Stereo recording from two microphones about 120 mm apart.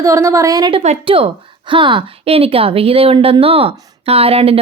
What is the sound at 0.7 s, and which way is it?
Speech, 55° right (ahead or behind).